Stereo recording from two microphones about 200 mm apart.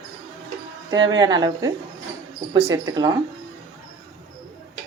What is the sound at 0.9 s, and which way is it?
Speech, 20° right (ahead or behind).